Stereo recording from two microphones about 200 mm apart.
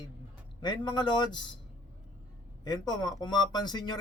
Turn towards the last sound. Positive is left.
turn(degrees=20)  # may be behind; listen again after turning